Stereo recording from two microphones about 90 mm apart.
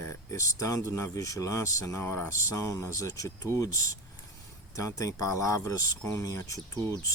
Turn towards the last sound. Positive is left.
turn(degrees=40)  # may be behind; listen again after turning